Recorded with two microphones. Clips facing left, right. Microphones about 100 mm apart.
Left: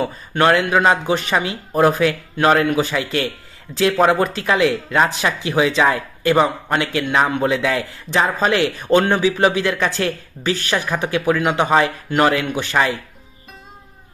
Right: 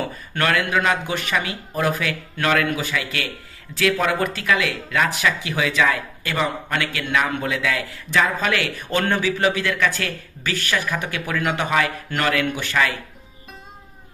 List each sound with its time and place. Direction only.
0.3 s speech: 25° left (ahead or behind)